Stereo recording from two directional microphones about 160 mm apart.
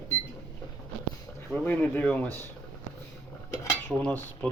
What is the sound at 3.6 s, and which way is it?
Cutlery, 15° left (ahead or behind).